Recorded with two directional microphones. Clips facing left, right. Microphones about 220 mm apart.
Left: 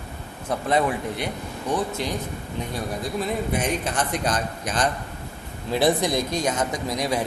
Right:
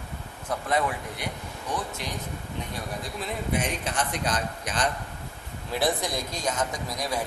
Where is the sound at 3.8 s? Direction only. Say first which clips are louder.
Left 4 dB; 45° left (ahead or behind).